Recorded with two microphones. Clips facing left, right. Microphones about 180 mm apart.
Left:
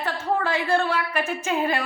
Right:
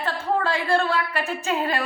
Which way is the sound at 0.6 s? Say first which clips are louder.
Right 1 dB; 15° left (ahead or behind).